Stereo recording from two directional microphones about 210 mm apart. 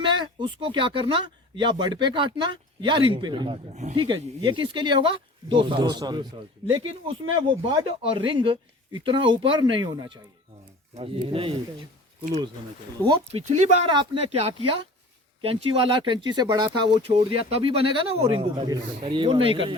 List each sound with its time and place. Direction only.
0.1 s speech: 20° right (ahead or behind)
3.8 s speech: 35° right (ahead or behind)
4.0 s speech: 20° right (ahead or behind)
13.1 s speech: 30° right (ahead or behind)
13.9 s speech: 20° right (ahead or behind)